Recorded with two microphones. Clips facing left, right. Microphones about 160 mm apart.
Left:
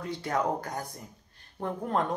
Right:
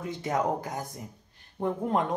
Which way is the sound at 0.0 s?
20° right (ahead or behind).